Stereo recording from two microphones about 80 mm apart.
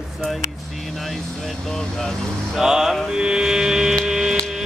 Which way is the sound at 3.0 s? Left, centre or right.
Centre.